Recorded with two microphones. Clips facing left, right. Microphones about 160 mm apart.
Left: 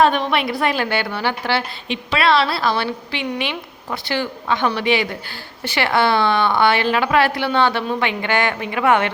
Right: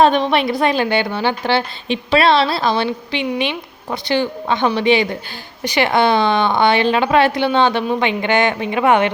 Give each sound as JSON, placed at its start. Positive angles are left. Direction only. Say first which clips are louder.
{"t": 0.0, "sound": "a woman's voice", "louder": "right 3 dB", "side_deg": -30}